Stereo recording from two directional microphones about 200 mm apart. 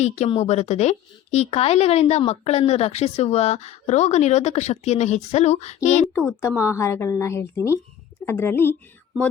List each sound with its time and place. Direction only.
0.0 s a woman's voice: 30° left (ahead or behind)
6.4 s a woman's voice: 10° left (ahead or behind)